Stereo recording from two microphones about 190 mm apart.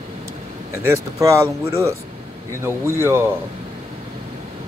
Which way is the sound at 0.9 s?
15° right (ahead or behind).